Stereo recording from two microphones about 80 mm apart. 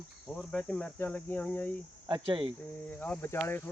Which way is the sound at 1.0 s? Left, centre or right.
Left.